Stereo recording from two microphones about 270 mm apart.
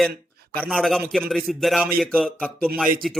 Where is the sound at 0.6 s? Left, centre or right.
Centre.